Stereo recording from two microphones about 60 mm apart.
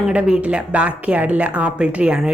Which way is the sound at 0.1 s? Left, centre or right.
Centre.